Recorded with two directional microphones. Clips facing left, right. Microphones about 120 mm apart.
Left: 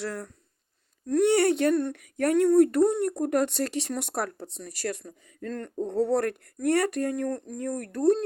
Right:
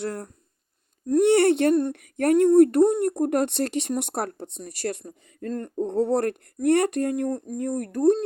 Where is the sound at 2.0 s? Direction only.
60° right (ahead or behind).